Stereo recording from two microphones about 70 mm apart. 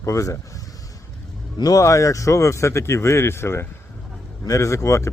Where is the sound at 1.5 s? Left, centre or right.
Left.